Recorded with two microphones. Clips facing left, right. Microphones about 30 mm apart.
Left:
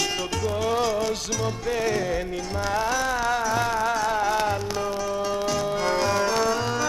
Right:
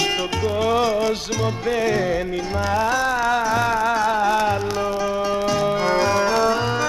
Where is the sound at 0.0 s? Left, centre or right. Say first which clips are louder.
Right 5 dB; right.